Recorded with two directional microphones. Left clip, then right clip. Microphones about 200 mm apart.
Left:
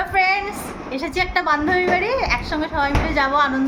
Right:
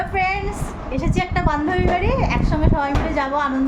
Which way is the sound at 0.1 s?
15° right (ahead or behind).